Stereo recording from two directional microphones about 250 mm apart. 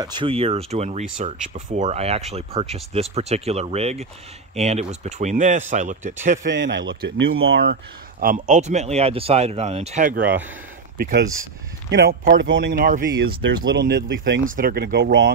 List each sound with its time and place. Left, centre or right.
0.0 s speech: centre
6.4 s speech: right
14.4 s speech: right